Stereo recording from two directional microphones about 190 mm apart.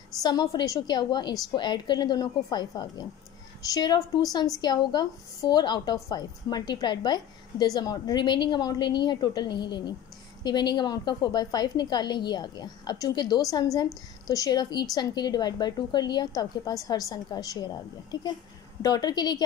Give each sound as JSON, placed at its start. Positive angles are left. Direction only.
{"t": 0.2, "sound": "a woman's voice", "side_deg": 20}
{"t": 18.8, "sound": "a woman's voice", "side_deg": 20}